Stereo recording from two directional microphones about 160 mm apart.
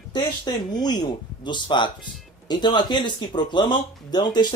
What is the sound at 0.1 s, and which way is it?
Speech, 25° left (ahead or behind).